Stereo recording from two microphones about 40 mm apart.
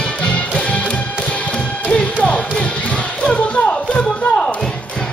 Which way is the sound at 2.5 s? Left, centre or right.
Left.